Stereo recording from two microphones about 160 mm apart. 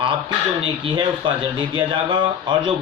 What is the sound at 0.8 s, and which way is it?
Speech, 30° right (ahead or behind).